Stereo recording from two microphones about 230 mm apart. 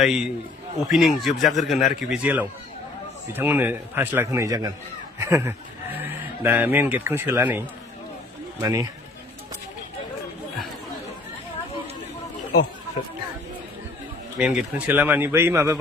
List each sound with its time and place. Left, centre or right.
0.0 s a man's voice: centre
8.6 s speech: centre
14.3 s speech: centre